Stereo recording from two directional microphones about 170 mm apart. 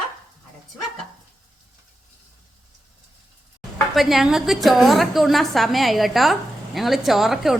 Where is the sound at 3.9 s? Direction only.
Centre (ahead or behind).